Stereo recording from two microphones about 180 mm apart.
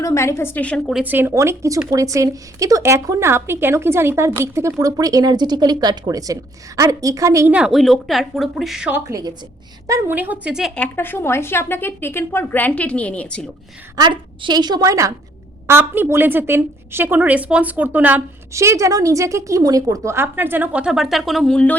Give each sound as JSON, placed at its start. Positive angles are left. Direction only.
{"t": 0.0, "sound": "speech", "side_deg": 15}
{"t": 1.0, "sound": "a woman's voice", "side_deg": -10}
{"t": 9.0, "sound": "a woman's voice", "side_deg": -20}
{"t": 10.8, "sound": "speech", "side_deg": 10}
{"t": 13.9, "sound": "a woman's voice", "side_deg": -25}